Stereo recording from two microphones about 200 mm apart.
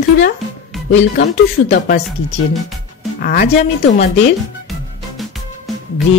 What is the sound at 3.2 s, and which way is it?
Speech, 45° left (ahead or behind).